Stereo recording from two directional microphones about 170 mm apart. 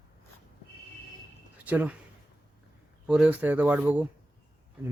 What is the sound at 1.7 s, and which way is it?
Speech, 10° right (ahead or behind).